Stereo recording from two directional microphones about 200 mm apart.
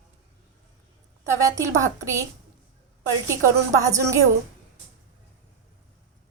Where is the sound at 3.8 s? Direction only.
15° right (ahead or behind).